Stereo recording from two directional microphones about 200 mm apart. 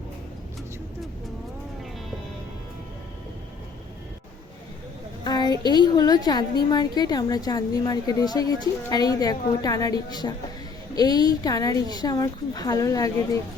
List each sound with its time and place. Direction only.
5.2 s a woman's voice: 20° left (ahead or behind)